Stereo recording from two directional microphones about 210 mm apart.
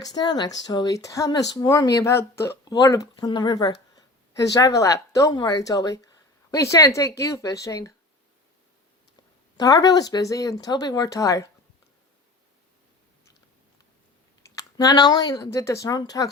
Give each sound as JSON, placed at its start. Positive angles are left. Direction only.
{"t": 0.0, "sound": "speech", "side_deg": 20}
{"t": 9.6, "sound": "speech", "side_deg": 20}
{"t": 14.5, "sound": "speech", "side_deg": 15}